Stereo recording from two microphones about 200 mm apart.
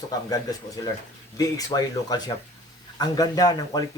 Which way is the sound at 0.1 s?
20° left (ahead or behind).